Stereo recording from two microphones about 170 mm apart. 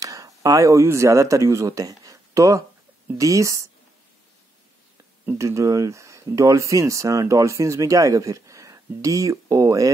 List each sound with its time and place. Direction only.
0.0 s speech: 20° right (ahead or behind)
5.2 s speech: 15° right (ahead or behind)